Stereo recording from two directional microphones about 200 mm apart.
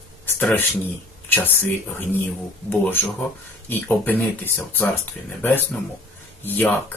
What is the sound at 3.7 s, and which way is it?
Speech, 10° left (ahead or behind).